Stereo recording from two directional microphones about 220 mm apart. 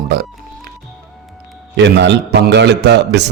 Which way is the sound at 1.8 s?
50° right (ahead or behind).